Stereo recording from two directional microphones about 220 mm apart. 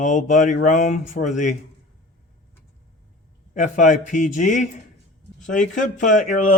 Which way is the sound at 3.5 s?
35° left (ahead or behind).